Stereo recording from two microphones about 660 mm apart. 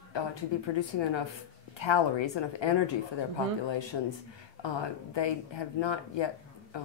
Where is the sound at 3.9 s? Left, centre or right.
Left.